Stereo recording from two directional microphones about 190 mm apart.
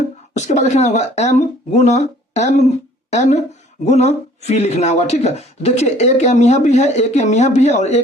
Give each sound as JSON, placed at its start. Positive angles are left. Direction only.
{"t": 0.3, "sound": "speech", "side_deg": 35}